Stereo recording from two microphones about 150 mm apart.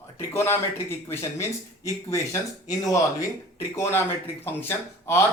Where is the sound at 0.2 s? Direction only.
15° left (ahead or behind).